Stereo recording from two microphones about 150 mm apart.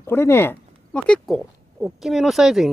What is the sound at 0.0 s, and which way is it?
Speech, 15° left (ahead or behind).